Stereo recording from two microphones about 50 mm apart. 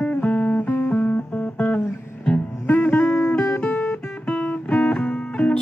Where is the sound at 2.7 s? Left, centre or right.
Left.